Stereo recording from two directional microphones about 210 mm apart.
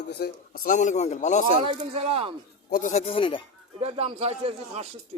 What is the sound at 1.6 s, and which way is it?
Speech, 25° right (ahead or behind).